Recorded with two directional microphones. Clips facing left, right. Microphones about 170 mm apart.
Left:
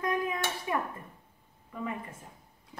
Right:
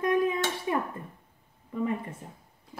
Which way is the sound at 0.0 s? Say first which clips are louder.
Right 6 dB; 25° right (ahead or behind).